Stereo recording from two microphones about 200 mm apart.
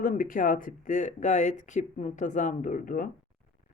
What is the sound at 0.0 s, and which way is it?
Speech, 45° left (ahead or behind).